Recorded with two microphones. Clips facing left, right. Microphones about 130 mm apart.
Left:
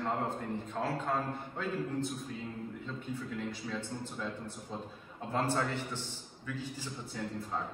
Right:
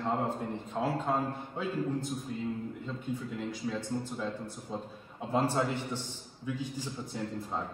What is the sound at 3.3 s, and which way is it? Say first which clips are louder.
Speech: right 3 dB; 5° right (ahead or behind).